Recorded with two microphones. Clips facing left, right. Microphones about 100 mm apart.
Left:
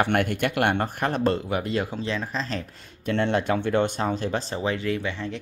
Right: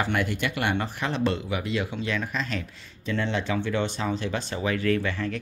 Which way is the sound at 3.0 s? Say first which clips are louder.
Left 4 dB; 55° left (ahead or behind).